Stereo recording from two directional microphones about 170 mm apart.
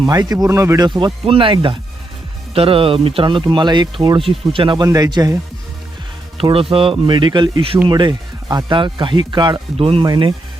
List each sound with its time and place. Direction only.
0.0 s speech: 20° right (ahead or behind)
0.9 s speech: 30° right (ahead or behind)
6.3 s speech: 35° right (ahead or behind)